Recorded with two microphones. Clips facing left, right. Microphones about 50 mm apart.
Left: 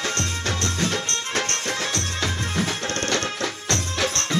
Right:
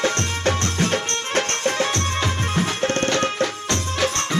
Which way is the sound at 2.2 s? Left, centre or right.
Centre.